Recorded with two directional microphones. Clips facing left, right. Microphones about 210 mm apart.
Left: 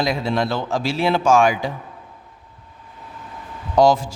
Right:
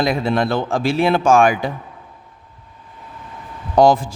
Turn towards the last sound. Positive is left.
turn(degrees=-55)  # may be behind; listen again after turning